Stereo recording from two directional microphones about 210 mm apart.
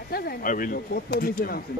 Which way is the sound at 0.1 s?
45° left (ahead or behind).